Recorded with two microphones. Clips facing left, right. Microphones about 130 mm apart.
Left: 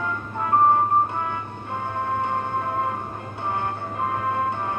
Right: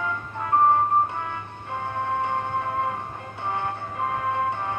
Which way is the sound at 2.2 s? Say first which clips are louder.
Left 1 dB; 35° left (ahead or behind).